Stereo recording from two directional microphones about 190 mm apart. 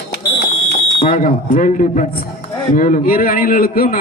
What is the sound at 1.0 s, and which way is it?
A man's voice, 45° left (ahead or behind).